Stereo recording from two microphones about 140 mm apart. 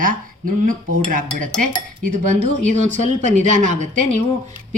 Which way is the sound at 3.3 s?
60° right (ahead or behind).